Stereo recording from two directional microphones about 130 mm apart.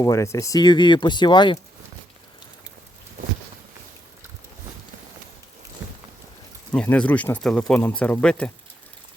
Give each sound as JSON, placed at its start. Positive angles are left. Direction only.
{"t": 0.0, "sound": "speech", "side_deg": 25}
{"t": 6.7, "sound": "speech", "side_deg": 10}